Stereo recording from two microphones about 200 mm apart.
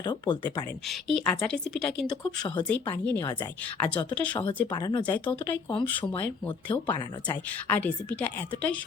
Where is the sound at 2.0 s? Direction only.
20° left (ahead or behind).